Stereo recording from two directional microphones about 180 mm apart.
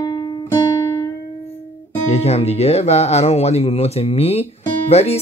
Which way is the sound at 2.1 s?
35° left (ahead or behind).